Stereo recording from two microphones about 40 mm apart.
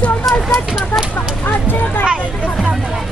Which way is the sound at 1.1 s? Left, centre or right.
Left.